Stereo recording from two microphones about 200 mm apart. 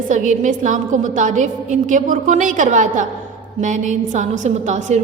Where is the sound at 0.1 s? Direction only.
40° right (ahead or behind).